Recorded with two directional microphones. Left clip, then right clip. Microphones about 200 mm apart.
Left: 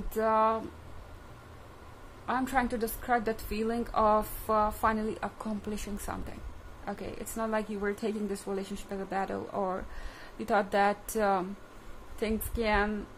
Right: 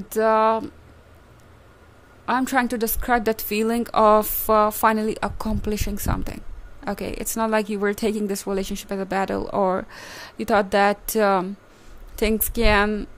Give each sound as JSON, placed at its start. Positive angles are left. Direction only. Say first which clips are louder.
{"t": 0.1, "sound": "a woman's voice", "louder": "right 8 dB", "side_deg": -50}
{"t": 2.2, "sound": "a woman's voice", "louder": "right 8 dB", "side_deg": -50}